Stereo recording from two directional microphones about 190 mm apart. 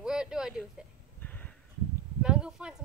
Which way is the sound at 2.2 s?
5° right (ahead or behind).